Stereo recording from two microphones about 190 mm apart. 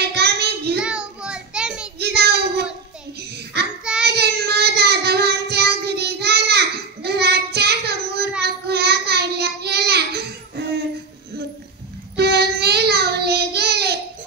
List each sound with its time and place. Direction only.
0.0 s child singing: 60° right (ahead or behind)
0.7 s child singing: 5° right (ahead or behind)
2.0 s child singing: 60° right (ahead or behind)
4.0 s child singing: 60° right (ahead or behind)
12.2 s child singing: 60° right (ahead or behind)